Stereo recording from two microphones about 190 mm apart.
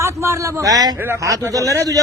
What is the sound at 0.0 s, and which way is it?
A man's voice, 15° right (ahead or behind).